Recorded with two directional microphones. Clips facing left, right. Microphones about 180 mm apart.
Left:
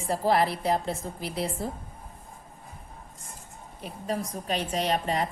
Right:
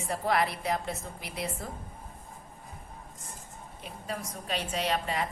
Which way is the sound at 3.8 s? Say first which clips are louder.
Left 6 dB; 35° left (ahead or behind).